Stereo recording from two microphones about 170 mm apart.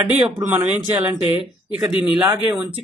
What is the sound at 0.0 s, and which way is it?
Speech, 10° right (ahead or behind).